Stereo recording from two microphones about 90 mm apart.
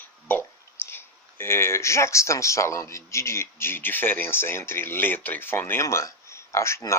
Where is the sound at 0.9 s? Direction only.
25° left (ahead or behind).